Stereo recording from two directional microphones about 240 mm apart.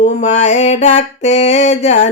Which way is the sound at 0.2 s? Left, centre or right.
Left.